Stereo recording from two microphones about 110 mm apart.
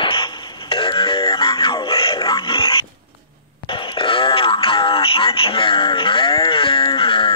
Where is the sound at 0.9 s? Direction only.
55° left (ahead or behind).